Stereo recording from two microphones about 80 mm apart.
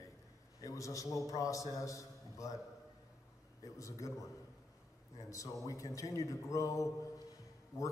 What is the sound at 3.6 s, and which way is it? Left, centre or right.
Speech, left.